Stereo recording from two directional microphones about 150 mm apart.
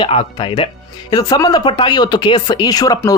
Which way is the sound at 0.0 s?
40° left (ahead or behind).